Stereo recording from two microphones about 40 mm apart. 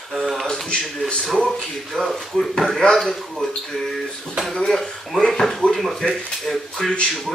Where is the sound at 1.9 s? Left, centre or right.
Centre.